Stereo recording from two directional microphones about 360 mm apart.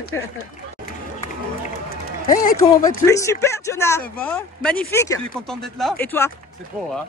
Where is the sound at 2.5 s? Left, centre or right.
Centre.